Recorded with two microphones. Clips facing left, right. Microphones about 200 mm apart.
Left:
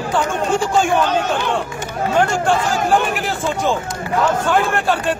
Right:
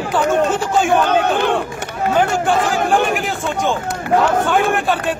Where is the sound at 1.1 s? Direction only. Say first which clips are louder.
Right 3 dB; 60° right (ahead or behind).